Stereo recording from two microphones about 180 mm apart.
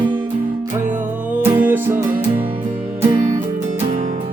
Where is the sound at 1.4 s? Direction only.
10° right (ahead or behind).